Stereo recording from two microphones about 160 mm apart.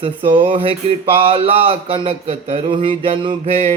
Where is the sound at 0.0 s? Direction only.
35° right (ahead or behind).